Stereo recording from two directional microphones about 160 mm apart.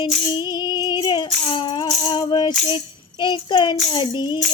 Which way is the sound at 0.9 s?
25° left (ahead or behind).